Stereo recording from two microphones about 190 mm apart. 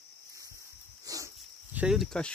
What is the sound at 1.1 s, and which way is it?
Dog, 20° right (ahead or behind).